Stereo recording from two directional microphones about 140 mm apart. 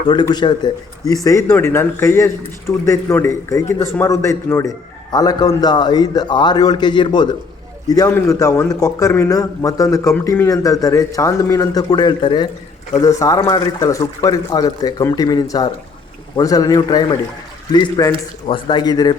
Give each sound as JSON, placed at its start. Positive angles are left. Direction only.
{"t": 0.1, "sound": "a man's voice", "side_deg": 30}
{"t": 13.0, "sound": "a man's voice", "side_deg": 20}